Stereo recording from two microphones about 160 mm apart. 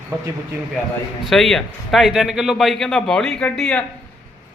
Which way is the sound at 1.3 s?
Centre (ahead or behind).